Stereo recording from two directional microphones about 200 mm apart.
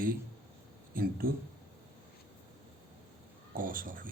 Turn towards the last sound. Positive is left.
turn(degrees=-45)  # may be behind; listen again after turning